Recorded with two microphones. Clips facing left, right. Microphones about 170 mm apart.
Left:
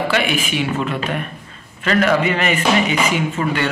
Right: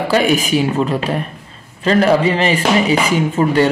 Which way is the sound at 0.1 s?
40° right (ahead or behind).